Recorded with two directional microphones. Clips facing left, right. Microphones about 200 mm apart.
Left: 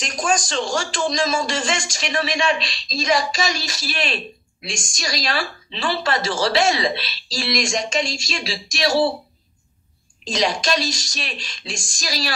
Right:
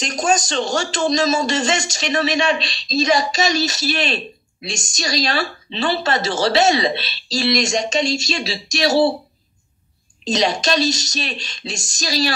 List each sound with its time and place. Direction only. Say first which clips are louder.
0.0 s a man's voice: right 3 dB; 25° right (ahead or behind)
10.3 s a man's voice: right 3 dB; 25° right (ahead or behind)